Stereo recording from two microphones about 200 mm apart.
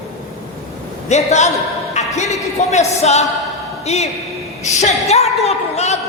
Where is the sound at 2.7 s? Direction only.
35° left (ahead or behind).